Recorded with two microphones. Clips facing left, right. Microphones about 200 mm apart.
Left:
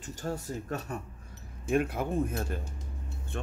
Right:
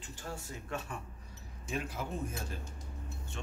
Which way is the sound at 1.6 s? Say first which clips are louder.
Left 10 dB; 55° left (ahead or behind).